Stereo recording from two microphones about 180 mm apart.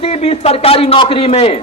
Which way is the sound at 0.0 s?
35° left (ahead or behind).